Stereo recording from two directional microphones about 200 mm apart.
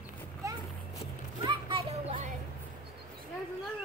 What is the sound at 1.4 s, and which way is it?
Children playing, 25° right (ahead or behind).